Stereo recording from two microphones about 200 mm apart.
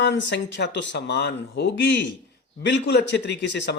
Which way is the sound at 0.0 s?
60° left (ahead or behind).